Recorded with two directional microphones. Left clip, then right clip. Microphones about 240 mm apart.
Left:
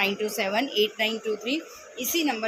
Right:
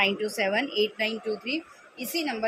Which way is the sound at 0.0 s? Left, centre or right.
Centre.